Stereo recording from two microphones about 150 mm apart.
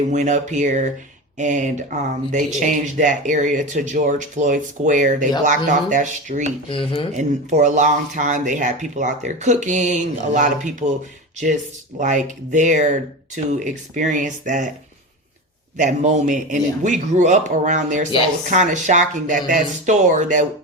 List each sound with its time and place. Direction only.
0.1 s speech: 55° right (ahead or behind)
6.7 s speech: 35° left (ahead or behind)
7.2 s speech: 55° right (ahead or behind)
11.9 s speech: 55° right (ahead or behind)
15.8 s speech: 60° right (ahead or behind)